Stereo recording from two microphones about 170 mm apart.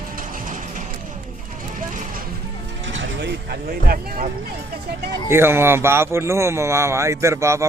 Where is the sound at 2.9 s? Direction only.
90° right; by 4.3 s 60° right (ahead or behind).